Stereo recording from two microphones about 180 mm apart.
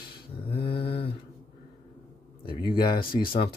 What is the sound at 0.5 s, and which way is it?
Mantra, 30° left (ahead or behind).